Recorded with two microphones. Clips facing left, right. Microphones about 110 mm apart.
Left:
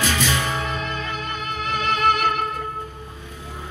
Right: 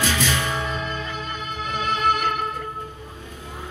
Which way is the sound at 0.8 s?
75° left (ahead or behind).